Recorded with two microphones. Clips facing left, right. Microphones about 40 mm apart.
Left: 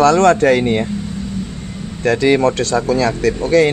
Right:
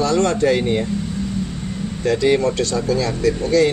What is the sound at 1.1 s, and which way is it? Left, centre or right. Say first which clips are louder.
Vehicle: even; centre.